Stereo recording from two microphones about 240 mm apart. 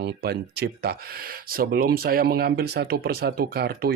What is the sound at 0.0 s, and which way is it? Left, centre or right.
Speech, right.